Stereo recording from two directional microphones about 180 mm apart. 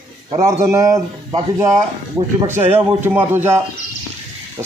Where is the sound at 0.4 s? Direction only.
15° right (ahead or behind).